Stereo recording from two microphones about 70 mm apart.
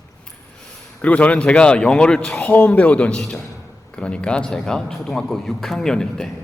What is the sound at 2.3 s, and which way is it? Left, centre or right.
A man's voice, left.